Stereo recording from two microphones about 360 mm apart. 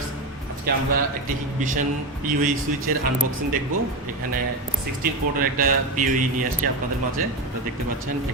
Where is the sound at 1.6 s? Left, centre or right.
Right.